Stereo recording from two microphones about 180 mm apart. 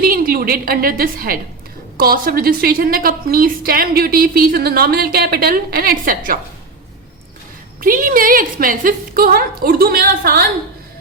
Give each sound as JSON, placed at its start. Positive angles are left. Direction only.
{"t": 0.0, "sound": "a woman's voice", "side_deg": -55}
{"t": 7.8, "sound": "a woman's voice", "side_deg": -50}